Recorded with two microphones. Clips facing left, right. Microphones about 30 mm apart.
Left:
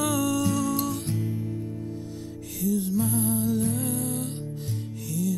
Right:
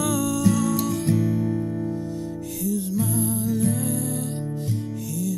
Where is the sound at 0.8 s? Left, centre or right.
Right.